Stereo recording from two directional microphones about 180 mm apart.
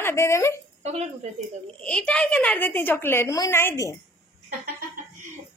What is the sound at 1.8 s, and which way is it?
A woman's voice, 5° left (ahead or behind).